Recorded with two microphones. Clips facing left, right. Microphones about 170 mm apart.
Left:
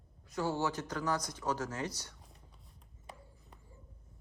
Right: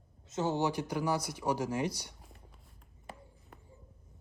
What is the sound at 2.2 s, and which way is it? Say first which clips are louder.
Whispering: right 3 dB; centre (ahead or behind).